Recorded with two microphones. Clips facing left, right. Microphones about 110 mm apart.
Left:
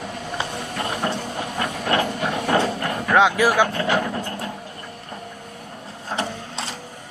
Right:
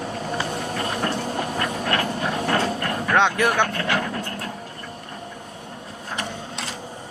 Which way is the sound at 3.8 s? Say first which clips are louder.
Left 2 dB; 15° left (ahead or behind).